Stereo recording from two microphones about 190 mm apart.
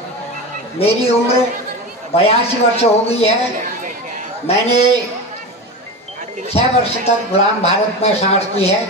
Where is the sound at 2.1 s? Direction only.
30° left (ahead or behind).